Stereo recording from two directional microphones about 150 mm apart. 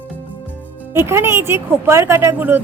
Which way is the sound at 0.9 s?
15° right (ahead or behind).